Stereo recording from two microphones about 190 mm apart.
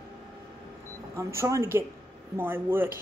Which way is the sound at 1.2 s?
15° right (ahead or behind).